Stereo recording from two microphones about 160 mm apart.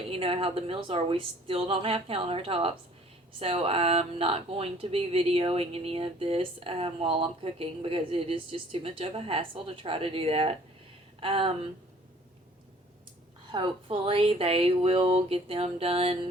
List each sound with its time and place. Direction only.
0.1 s speech: 35° right (ahead or behind)
13.5 s speech: 35° right (ahead or behind)